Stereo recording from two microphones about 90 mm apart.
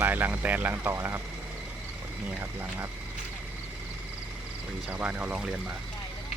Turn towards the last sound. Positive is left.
turn(degrees=-10)  # may be behind; listen again after turning